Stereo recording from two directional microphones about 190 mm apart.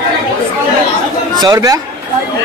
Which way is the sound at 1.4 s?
20° right (ahead or behind).